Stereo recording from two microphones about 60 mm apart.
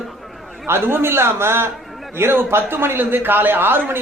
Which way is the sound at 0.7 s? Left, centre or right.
Right.